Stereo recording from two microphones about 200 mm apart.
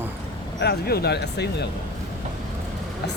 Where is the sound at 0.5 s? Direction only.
55° left (ahead or behind).